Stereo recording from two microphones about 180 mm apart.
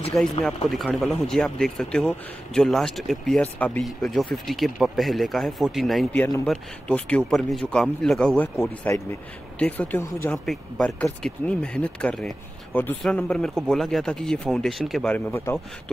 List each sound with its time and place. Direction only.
0.1 s speech: centre (ahead or behind)
8.5 s speech: 15° left (ahead or behind)